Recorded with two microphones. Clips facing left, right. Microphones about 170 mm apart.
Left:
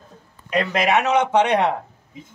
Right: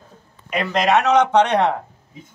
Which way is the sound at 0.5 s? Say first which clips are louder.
Right 1 dB; 10° left (ahead or behind).